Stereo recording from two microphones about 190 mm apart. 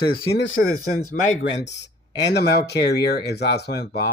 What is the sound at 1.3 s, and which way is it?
Speech, 70° left (ahead or behind).